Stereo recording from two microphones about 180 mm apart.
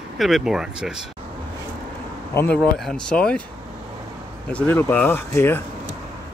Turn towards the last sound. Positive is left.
turn(degrees=15)  # may be behind; listen again after turning